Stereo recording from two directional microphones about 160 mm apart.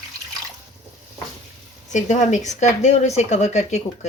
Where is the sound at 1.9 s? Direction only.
50° left (ahead or behind).